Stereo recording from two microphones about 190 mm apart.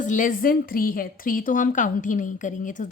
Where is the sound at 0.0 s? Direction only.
45° left (ahead or behind).